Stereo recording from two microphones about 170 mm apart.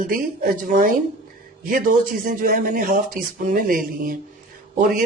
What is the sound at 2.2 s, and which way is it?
Speech, 50° right (ahead or behind).